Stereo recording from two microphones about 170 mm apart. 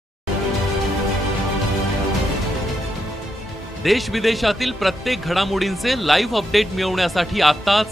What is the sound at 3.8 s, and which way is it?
A man's voice, centre (ahead or behind).